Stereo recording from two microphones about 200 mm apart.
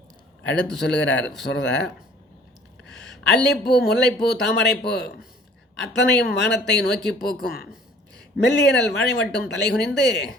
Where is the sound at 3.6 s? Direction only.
55° left (ahead or behind).